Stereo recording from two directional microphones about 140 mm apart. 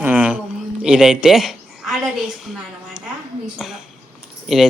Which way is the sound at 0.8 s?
5° right (ahead or behind).